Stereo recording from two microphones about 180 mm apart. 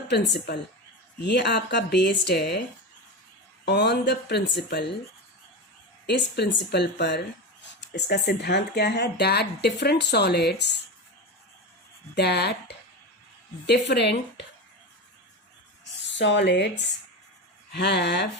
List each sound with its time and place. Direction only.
0.1 s speech: 65° left (ahead or behind)
3.7 s speech: 70° left (ahead or behind)
6.1 s speech: 70° left (ahead or behind)
12.1 s speech: 65° left (ahead or behind)
16.0 s speech: 75° left (ahead or behind)